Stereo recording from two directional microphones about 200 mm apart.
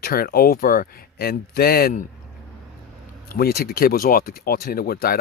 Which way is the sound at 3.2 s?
50° left (ahead or behind).